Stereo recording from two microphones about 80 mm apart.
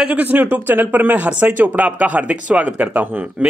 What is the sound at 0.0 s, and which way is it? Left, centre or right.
A man's voice, centre.